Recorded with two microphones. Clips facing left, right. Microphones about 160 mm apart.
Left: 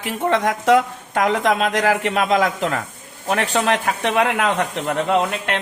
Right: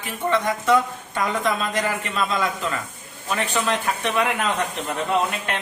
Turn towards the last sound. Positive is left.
turn(degrees=70)  # may be behind; listen again after turning